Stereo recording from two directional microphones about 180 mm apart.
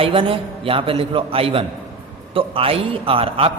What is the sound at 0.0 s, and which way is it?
A man's voice, 30° right (ahead or behind).